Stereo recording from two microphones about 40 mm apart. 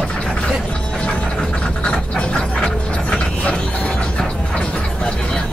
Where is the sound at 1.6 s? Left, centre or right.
Left.